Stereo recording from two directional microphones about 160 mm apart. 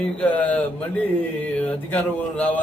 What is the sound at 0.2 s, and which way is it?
Speech, 10° left (ahead or behind).